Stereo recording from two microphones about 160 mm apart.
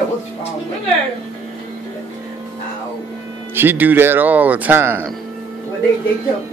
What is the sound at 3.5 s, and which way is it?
Speech, 15° right (ahead or behind).